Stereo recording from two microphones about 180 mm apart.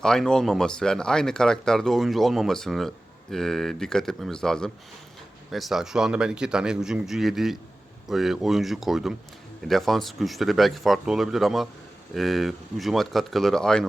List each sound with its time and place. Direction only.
0.0 s speech: 5° left (ahead or behind)